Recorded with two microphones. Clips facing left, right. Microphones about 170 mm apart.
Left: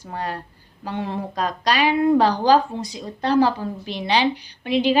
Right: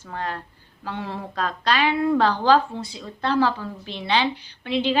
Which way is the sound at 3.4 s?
40° left (ahead or behind).